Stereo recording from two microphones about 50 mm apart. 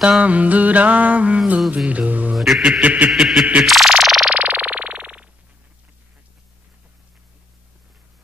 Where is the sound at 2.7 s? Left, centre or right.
Right.